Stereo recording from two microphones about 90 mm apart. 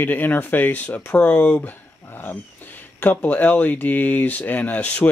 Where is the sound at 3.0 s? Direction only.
20° left (ahead or behind).